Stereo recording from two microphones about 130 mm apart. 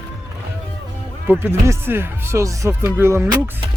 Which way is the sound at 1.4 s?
20° right (ahead or behind).